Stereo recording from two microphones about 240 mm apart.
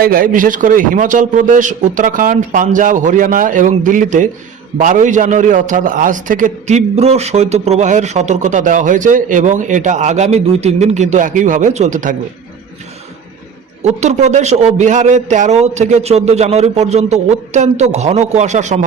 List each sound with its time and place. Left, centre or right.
0.0 s a man's voice: right
13.8 s a man's voice: right